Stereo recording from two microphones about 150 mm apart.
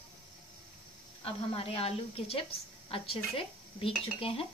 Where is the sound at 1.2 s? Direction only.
40° left (ahead or behind).